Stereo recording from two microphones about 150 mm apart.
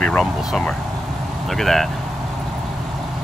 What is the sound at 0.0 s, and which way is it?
Speech, centre (ahead or behind).